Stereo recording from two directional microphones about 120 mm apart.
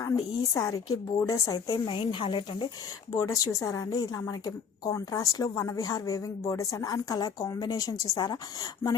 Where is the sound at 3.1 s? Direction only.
30° left (ahead or behind).